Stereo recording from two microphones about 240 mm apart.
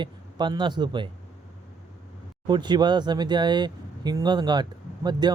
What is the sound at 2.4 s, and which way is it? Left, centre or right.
Speech, centre.